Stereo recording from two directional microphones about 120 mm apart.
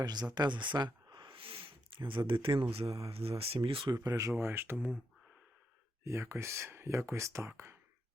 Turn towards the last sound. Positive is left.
turn(degrees=-20)  # may be behind; listen again after turning